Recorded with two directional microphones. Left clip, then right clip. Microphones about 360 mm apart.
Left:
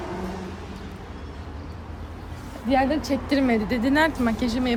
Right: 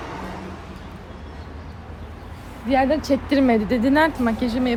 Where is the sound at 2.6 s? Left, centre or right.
Centre.